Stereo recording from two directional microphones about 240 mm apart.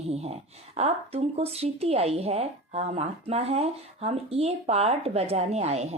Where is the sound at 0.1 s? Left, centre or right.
Right.